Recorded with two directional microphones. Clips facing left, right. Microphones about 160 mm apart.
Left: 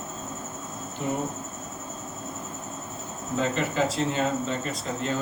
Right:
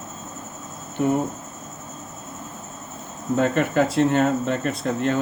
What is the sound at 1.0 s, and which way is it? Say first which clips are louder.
Speech: right 9 dB; 60° right (ahead or behind).